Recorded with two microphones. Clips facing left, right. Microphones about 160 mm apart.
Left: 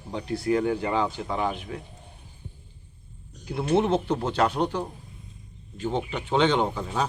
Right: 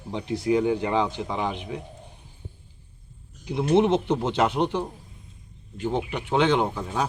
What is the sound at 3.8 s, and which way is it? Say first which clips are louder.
Speech: right 3 dB; 20° right (ahead or behind).